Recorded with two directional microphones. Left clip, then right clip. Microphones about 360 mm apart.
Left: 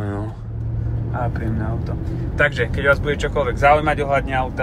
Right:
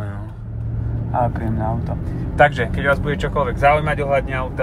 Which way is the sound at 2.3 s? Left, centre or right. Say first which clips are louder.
Right 4 dB; centre.